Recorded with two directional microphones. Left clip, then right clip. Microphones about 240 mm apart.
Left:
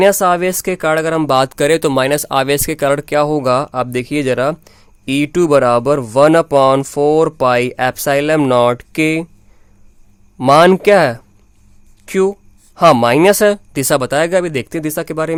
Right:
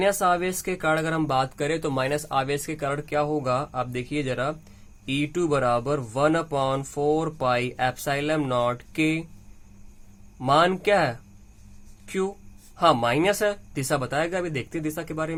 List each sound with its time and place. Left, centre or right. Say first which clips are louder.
0.0 s speech: left 11 dB; left
10.3 s speech: left 12 dB; left